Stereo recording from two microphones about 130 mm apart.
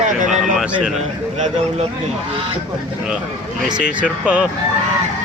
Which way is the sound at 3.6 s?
5° right (ahead or behind).